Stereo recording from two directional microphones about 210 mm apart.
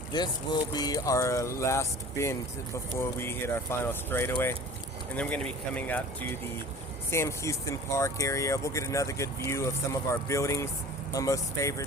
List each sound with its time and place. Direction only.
0.1 s speech: 20° left (ahead or behind)
7.1 s speech: 15° left (ahead or behind)